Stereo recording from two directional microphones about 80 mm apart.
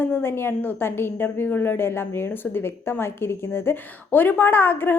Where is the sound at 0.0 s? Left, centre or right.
Left.